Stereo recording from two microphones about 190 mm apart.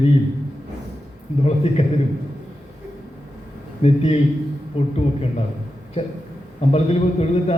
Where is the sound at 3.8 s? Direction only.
35° left (ahead or behind).